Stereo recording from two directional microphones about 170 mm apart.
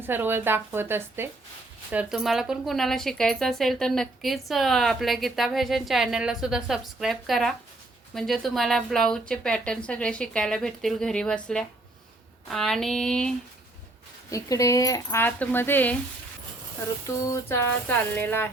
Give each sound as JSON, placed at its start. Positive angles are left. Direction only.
{"t": 0.0, "sound": "speech", "side_deg": -10}
{"t": 12.5, "sound": "speech", "side_deg": 0}
{"t": 14.3, "sound": "speech", "side_deg": 20}
{"t": 17.2, "sound": "speech", "side_deg": 15}